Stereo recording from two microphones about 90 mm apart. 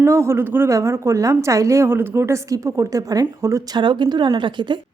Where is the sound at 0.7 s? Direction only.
35° right (ahead or behind).